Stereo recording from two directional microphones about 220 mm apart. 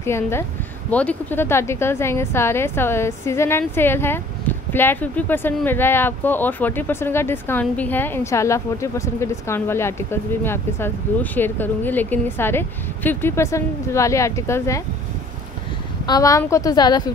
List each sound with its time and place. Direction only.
0.0 s speech: 10° left (ahead or behind)
16.1 s speech: 15° left (ahead or behind)